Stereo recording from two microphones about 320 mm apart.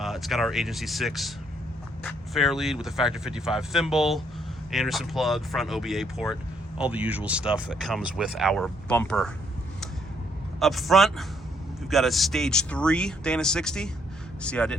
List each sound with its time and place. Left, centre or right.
0.0 s speech: centre
10.6 s speech: centre